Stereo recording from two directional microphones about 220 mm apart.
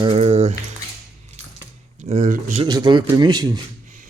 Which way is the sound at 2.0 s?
30° right (ahead or behind).